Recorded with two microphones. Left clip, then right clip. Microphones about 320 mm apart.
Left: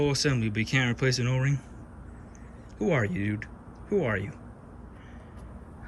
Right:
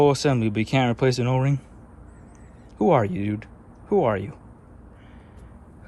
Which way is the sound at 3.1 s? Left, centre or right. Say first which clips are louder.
Right 3 dB; centre.